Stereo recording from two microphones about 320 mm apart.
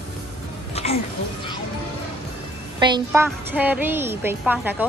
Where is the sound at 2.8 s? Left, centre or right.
Centre.